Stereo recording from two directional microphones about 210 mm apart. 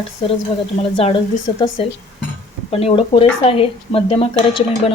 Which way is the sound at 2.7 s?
30° left (ahead or behind).